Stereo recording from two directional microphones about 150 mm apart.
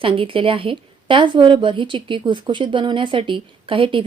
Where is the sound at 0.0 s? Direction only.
35° right (ahead or behind).